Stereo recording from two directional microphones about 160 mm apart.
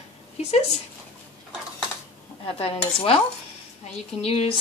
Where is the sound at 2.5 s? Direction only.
40° left (ahead or behind).